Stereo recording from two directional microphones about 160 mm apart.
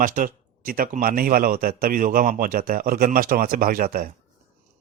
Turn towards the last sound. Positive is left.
turn(degrees=-60)  # may be behind; listen again after turning